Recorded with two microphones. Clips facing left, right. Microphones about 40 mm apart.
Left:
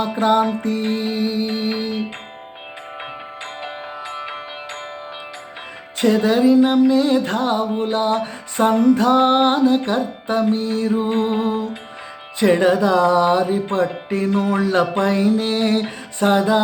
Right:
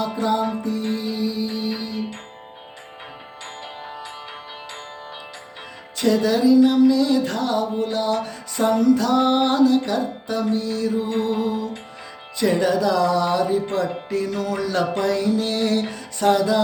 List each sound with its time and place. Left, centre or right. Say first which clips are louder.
0.0 s music: left 5 dB; left
3.6 s music: left 4 dB; left
6.0 s music: left 3 dB; left